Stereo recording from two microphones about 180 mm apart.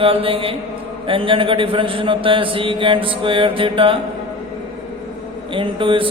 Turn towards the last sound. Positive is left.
turn(degrees=-30)  # may be behind; listen again after turning